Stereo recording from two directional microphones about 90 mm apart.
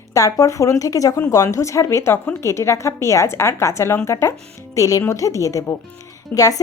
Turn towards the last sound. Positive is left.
turn(degrees=40)  # may be behind; listen again after turning